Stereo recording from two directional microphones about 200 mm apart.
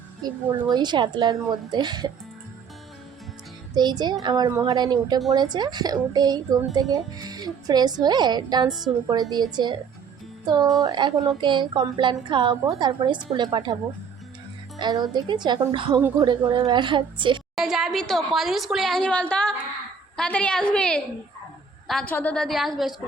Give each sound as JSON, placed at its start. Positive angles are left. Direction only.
{"t": 0.2, "sound": "a woman's voice", "side_deg": -20}
{"t": 3.8, "sound": "a woman's voice", "side_deg": -20}
{"t": 14.8, "sound": "a woman's voice", "side_deg": -20}
{"t": 17.5, "sound": "a woman's voice", "side_deg": 0}